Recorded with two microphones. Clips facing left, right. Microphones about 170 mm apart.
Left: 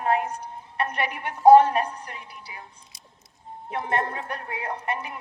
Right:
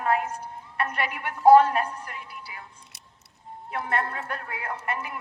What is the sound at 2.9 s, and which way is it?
Music, 70° right (ahead or behind).